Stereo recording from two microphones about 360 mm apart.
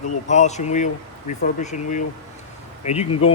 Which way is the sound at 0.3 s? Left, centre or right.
Centre.